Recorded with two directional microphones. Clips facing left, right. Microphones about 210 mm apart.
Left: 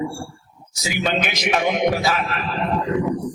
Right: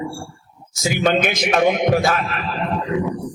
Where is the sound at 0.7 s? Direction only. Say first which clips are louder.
Right 5 dB; 50° right (ahead or behind).